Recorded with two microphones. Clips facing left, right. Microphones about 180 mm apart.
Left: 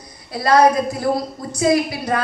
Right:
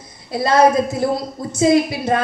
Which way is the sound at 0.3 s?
25° right (ahead or behind).